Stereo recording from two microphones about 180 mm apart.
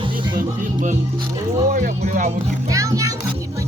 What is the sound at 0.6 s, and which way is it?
Speech, 45° right (ahead or behind).